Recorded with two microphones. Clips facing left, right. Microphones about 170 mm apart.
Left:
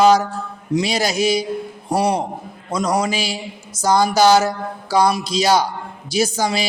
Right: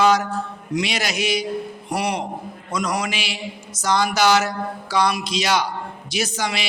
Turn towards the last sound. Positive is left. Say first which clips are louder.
# left 6 dB
turn(degrees=30)  # may be behind; listen again after turning